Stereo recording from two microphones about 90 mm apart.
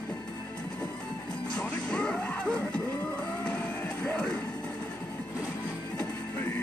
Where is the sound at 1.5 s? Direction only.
10° left (ahead or behind).